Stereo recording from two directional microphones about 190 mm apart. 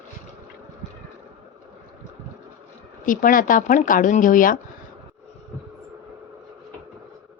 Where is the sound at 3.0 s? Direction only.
45° left (ahead or behind).